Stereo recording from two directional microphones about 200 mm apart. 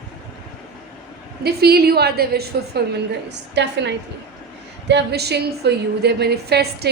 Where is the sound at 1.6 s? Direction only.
50° right (ahead or behind).